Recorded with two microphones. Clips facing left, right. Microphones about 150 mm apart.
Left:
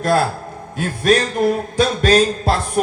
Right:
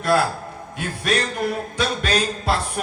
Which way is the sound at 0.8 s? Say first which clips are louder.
Left 7 dB; 45° left (ahead or behind).